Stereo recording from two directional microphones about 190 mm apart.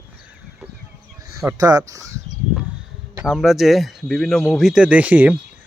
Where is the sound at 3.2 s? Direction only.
Centre (ahead or behind).